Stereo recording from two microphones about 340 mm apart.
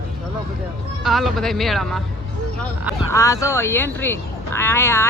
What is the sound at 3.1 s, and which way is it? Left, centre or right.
Speech, centre.